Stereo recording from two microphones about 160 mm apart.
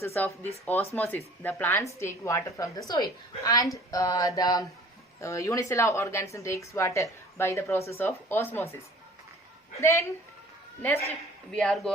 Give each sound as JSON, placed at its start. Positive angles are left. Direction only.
{"t": 0.0, "sound": "a woman's voice", "side_deg": 15}
{"t": 3.9, "sound": "a sound", "side_deg": 20}
{"t": 5.2, "sound": "a woman's voice", "side_deg": 20}
{"t": 9.8, "sound": "a woman's voice", "side_deg": 15}
{"t": 11.5, "sound": "speech", "side_deg": 5}